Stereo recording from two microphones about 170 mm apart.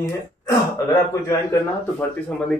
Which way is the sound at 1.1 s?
15° left (ahead or behind).